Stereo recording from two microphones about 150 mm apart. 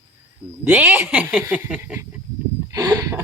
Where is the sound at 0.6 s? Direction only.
15° right (ahead or behind).